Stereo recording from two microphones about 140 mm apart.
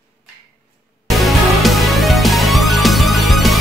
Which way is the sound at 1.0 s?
Centre (ahead or behind).